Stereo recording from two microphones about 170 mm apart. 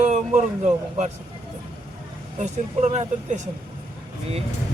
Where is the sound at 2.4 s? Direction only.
45° right (ahead or behind).